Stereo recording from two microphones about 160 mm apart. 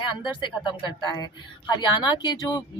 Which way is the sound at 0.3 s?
30° left (ahead or behind).